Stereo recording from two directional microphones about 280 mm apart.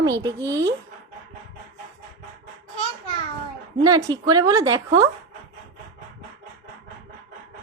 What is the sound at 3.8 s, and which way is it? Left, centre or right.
A child's voice, centre.